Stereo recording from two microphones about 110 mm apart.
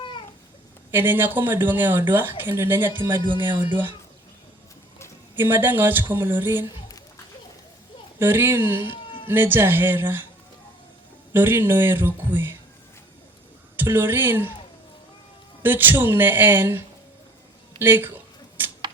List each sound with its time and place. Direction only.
0.9 s speech: 20° right (ahead or behind)
5.4 s speech: 20° right (ahead or behind)
8.2 s speech: 20° right (ahead or behind)
11.3 s speech: 20° right (ahead or behind)
13.7 s speech: 20° right (ahead or behind)
15.6 s speech: 20° right (ahead or behind)